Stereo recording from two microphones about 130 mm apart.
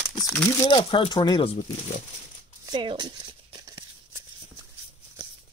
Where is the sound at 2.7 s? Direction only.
35° right (ahead or behind).